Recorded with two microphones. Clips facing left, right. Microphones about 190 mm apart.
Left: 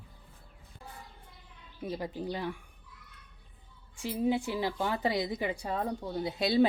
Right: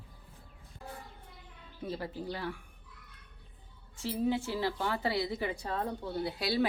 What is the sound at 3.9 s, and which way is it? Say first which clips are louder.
A woman's voice: left 2 dB; 15° left (ahead or behind).